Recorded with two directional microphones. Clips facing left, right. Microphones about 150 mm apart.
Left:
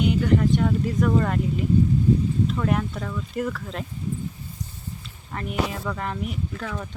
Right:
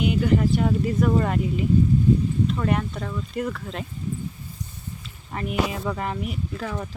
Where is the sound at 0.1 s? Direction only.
10° right (ahead or behind).